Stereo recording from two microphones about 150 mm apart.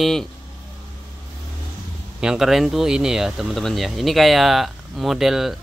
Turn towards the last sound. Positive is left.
turn(degrees=0)  # may be behind; listen again after turning